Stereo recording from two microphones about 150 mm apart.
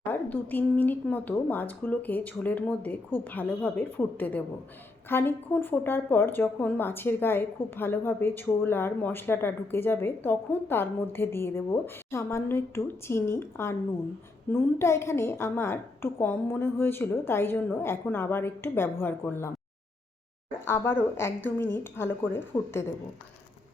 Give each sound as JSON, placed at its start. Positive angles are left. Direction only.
{"t": 0.1, "sound": "speech", "side_deg": 10}
{"t": 20.7, "sound": "speech", "side_deg": 15}